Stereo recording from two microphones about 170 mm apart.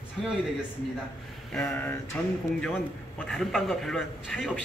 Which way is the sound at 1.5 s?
10° left (ahead or behind).